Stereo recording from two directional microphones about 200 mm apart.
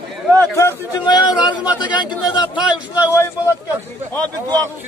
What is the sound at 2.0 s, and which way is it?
Speech, 20° left (ahead or behind).